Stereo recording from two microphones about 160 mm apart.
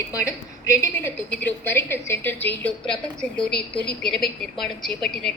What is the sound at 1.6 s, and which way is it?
A woman's voice, 15° left (ahead or behind).